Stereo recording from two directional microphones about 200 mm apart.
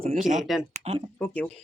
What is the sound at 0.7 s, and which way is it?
Speech, 30° right (ahead or behind).